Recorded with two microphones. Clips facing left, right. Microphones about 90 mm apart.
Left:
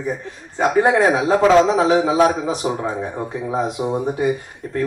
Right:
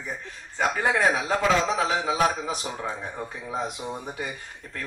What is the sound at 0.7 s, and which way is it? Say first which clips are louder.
Speech: left 9 dB; 25° left (ahead or behind).